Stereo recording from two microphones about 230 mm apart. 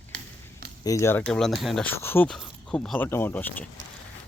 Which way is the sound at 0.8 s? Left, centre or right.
Centre.